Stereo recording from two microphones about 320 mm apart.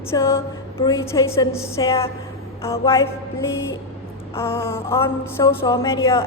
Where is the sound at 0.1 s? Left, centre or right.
Centre.